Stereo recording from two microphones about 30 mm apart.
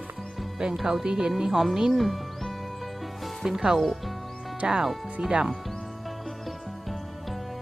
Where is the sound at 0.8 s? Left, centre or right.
Centre.